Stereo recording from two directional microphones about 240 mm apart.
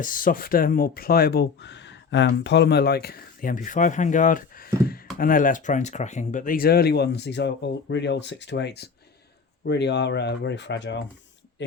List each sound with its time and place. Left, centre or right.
0.0 s speech: left